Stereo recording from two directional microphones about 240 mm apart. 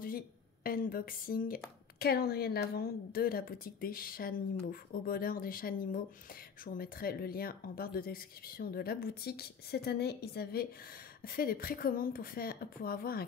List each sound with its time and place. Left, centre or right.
0.7 s speech: left